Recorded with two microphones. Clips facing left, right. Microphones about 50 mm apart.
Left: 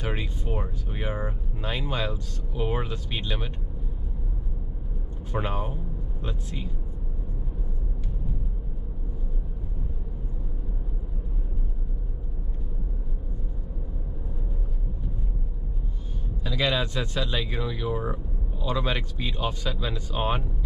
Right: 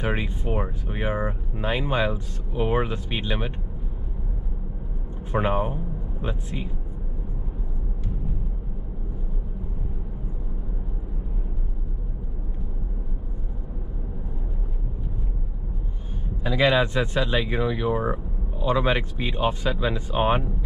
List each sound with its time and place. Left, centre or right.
0.0 s speech: right
5.3 s speech: right
16.4 s speech: right